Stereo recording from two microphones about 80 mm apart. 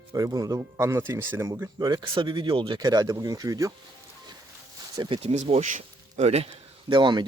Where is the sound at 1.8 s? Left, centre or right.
Right.